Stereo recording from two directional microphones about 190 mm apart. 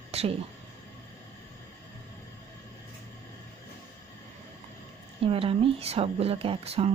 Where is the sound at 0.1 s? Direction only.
35° right (ahead or behind).